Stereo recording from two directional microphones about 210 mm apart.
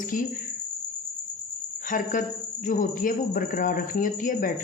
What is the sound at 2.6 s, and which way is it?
Speech, 40° left (ahead or behind).